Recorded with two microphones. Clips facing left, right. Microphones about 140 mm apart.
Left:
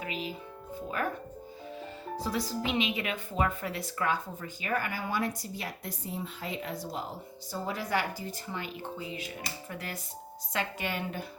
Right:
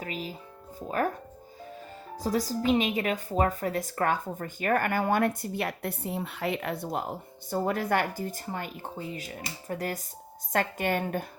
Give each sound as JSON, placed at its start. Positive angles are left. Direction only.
{"t": 0.0, "sound": "music", "side_deg": -40}
{"t": 0.9, "sound": "speech", "side_deg": -40}
{"t": 2.2, "sound": "a woman's voice", "side_deg": -40}